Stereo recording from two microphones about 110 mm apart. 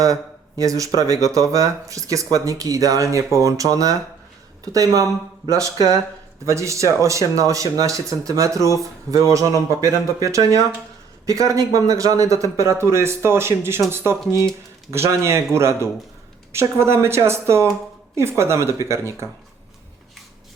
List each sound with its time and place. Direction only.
0.0 s speech: 30° right (ahead or behind)